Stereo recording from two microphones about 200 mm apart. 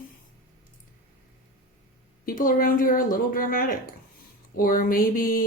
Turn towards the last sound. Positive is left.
turn(degrees=45)  # may be behind; listen again after turning